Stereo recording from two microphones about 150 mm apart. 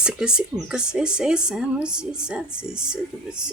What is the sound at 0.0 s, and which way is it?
Speech, 5° right (ahead or behind).